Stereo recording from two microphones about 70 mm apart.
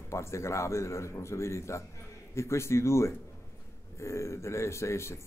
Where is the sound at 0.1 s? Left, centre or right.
Left.